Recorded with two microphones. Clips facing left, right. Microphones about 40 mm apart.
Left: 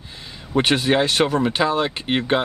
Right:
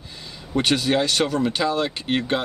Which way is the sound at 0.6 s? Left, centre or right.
Left.